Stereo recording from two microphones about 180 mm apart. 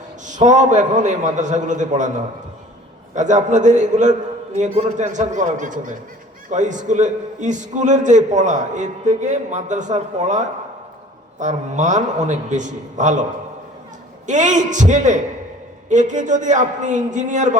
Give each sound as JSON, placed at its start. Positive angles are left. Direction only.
{"t": 0.3, "sound": "a man's voice", "side_deg": -40}
{"t": 14.3, "sound": "a man's voice", "side_deg": -40}